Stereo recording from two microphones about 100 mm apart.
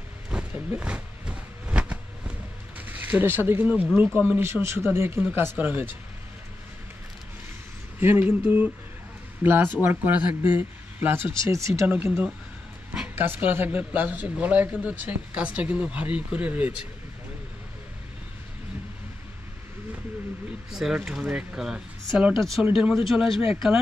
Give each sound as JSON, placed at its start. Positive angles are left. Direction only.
{"t": 0.3, "sound": "a sound", "side_deg": -10}
{"t": 2.9, "sound": "speech", "side_deg": -20}
{"t": 4.4, "sound": "speech", "side_deg": -25}
{"t": 8.0, "sound": "speech", "side_deg": -20}
{"t": 11.9, "sound": "speech", "side_deg": -20}
{"t": 20.7, "sound": "speech", "side_deg": -5}